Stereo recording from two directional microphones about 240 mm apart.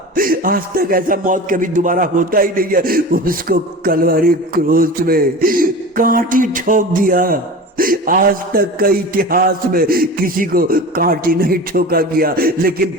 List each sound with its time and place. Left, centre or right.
0.2 s speech: right